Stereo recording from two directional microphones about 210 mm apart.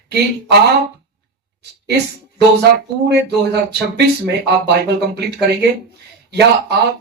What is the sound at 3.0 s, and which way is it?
Speech, 55° right (ahead or behind).